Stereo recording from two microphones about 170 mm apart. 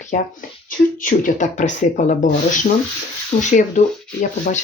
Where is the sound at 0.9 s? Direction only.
50° left (ahead or behind).